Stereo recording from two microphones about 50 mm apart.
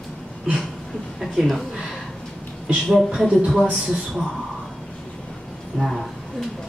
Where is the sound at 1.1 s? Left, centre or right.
Centre.